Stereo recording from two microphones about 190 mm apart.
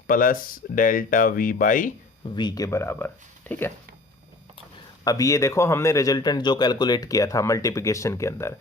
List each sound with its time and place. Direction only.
0.1 s speech: 45° left (ahead or behind)
2.3 s speech: 20° left (ahead or behind)
5.0 s speech: 15° left (ahead or behind)